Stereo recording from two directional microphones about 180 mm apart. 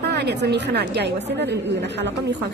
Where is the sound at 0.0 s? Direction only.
65° right (ahead or behind).